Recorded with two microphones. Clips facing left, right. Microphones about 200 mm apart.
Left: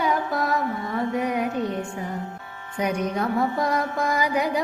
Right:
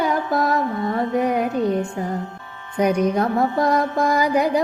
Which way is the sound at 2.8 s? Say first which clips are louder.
Right 6 dB; 45° right (ahead or behind).